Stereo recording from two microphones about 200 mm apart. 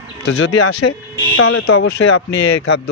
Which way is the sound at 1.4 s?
90° left.